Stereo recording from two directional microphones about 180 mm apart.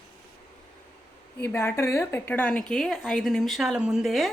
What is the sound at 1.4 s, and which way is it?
A woman's voice, 15° left (ahead or behind).